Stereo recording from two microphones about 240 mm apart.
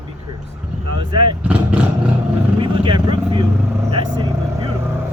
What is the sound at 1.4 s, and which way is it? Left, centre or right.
Speech, centre.